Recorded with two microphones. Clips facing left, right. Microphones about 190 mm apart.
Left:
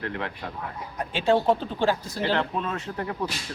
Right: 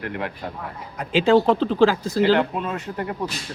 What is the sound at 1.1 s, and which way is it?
Speech, 90° right.